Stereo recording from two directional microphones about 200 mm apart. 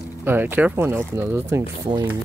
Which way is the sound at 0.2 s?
10° right (ahead or behind).